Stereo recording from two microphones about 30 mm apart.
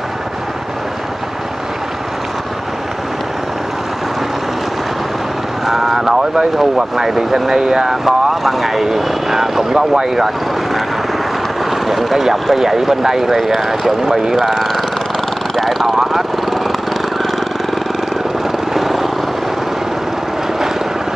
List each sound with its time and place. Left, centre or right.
5.7 s vehicle: centre
5.9 s speech: centre
8.0 s speech: centre
18.7 s vehicle: centre